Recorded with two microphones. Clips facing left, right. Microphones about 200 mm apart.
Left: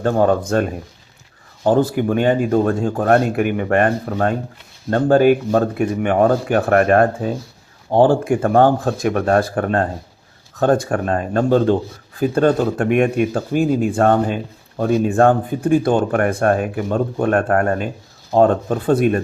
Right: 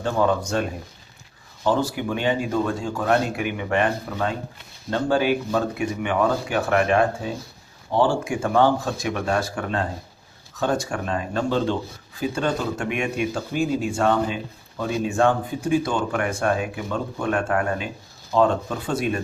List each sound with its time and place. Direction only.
0.0 s speech: 45° left (ahead or behind)